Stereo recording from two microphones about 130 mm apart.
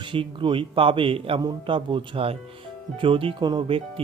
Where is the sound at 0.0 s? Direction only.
40° right (ahead or behind).